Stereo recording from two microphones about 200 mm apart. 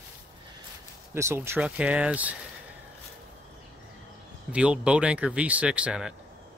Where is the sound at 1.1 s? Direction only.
15° right (ahead or behind).